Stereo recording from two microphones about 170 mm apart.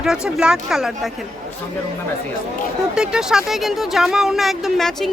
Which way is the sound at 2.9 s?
5° right (ahead or behind).